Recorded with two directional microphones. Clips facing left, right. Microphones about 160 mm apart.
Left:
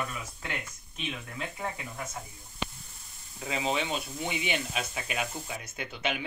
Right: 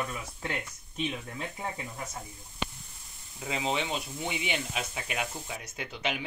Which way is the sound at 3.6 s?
20° right (ahead or behind).